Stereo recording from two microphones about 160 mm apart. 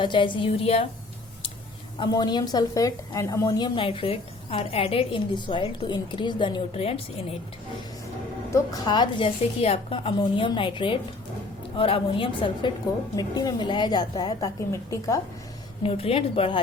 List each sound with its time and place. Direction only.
0.0 s a woman's voice: 30° left (ahead or behind)
2.0 s a woman's voice: 25° left (ahead or behind)
8.4 s a woman's voice: 25° left (ahead or behind)
15.8 s a woman's voice: 35° left (ahead or behind)